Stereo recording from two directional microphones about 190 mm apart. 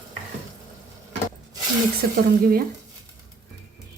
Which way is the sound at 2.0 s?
55° right (ahead or behind).